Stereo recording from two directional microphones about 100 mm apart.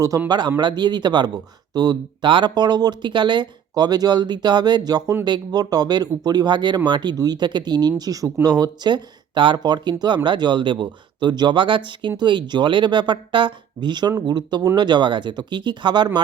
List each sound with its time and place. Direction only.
0.3 s speech: 45° right (ahead or behind)